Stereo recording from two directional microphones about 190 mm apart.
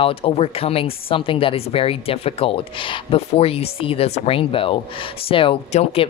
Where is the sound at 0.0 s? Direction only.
30° left (ahead or behind).